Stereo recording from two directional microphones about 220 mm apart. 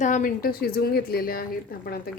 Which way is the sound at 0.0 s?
35° left (ahead or behind).